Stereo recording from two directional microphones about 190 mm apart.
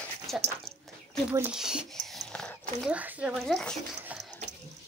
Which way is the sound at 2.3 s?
5° left (ahead or behind).